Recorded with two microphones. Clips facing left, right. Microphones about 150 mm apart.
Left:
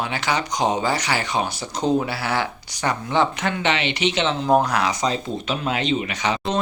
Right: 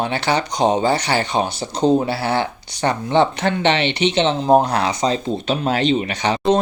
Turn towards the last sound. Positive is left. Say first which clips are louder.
# right 4 dB
turn(degrees=-30)  # may be behind; listen again after turning